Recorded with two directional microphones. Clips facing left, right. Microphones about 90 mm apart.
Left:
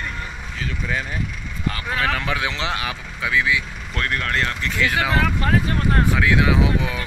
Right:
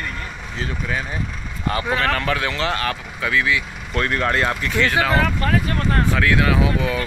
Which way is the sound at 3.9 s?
15° right (ahead or behind).